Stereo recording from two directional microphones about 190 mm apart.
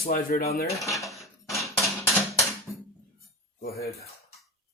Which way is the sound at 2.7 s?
15° left (ahead or behind).